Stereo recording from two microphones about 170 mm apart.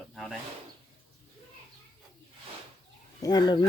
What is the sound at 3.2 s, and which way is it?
Speech, 25° left (ahead or behind).